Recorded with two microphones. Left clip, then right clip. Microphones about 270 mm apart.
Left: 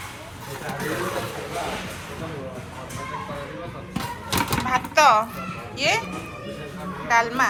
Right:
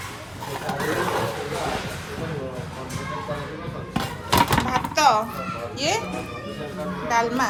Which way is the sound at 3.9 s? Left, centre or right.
Centre.